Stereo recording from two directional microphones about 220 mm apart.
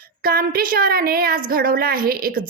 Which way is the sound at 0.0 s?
40° right (ahead or behind).